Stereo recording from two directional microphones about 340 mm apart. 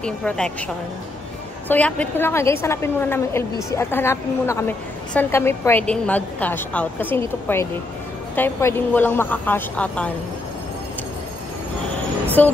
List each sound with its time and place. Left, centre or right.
0.0 s a woman's voice: centre
1.7 s a woman's voice: centre
12.4 s a woman's voice: centre